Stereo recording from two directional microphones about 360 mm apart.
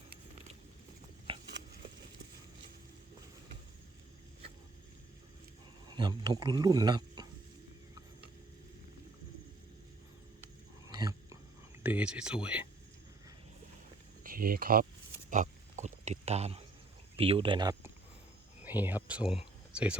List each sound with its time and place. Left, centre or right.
6.0 s speech: centre
10.9 s dog: centre
11.8 s speech: centre
14.3 s speech: right
15.3 s a sound: centre
17.2 s speech: centre